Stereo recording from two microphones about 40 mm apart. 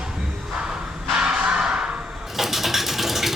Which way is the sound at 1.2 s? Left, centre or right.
Centre.